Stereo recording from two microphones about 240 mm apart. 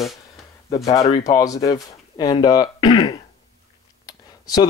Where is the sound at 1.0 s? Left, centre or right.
Left.